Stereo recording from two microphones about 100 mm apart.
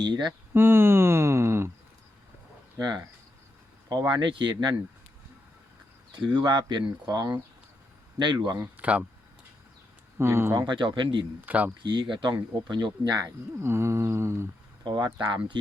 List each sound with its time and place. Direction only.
0.0 s speech: 45° right (ahead or behind)
0.5 s a sound: 20° right (ahead or behind)
3.8 s speech: 45° right (ahead or behind)
6.1 s speech: 50° right (ahead or behind)
8.8 s speech: 15° right (ahead or behind)
10.2 s speech: 25° right (ahead or behind)
10.7 s speech: 55° right (ahead or behind)
11.3 s speech: 15° right (ahead or behind)
11.8 s speech: 50° right (ahead or behind)
13.2 s speech: 25° right (ahead or behind)
14.8 s speech: 50° right (ahead or behind)